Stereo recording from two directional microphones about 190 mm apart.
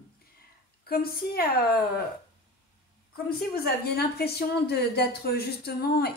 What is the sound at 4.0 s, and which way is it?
A woman's voice, 55° left (ahead or behind).